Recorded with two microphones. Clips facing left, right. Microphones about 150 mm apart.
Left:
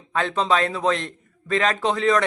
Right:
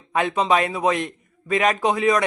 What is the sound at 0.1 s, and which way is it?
A man's voice, 15° right (ahead or behind).